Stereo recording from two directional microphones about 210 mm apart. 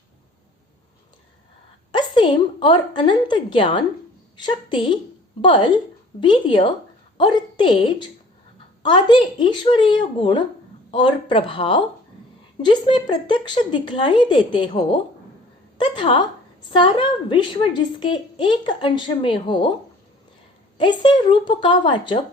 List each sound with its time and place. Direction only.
1.9 s a woman's voice: 20° left (ahead or behind)
20.7 s a woman's voice: 20° left (ahead or behind)